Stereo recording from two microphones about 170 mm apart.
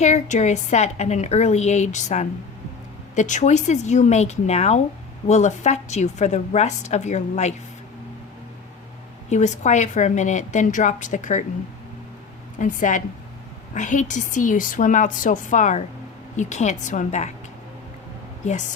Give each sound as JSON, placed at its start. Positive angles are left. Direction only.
{"t": 0.0, "sound": "a woman's voice", "side_deg": 40}
{"t": 9.3, "sound": "a woman's voice", "side_deg": 45}
{"t": 12.5, "sound": "a woman's voice", "side_deg": 50}
{"t": 18.4, "sound": "a woman's voice", "side_deg": 45}